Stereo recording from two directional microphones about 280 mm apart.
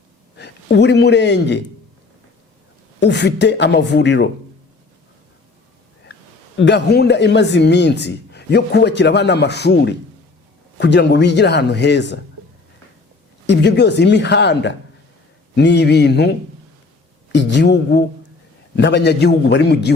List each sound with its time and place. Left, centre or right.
0.3 s a man's voice: left
3.0 s speech: left
6.6 s speech: left
13.5 s speech: left
17.3 s speech: left